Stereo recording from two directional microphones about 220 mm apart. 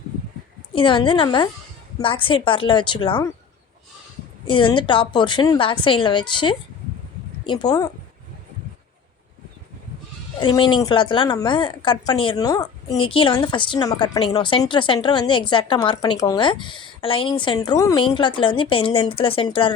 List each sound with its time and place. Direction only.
0.7 s a woman's voice: 20° left (ahead or behind)
4.4 s a woman's voice: 20° left (ahead or behind)
10.4 s a woman's voice: 20° left (ahead or behind)